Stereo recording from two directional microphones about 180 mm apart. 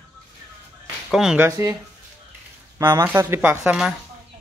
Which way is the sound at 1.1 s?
5° right (ahead or behind).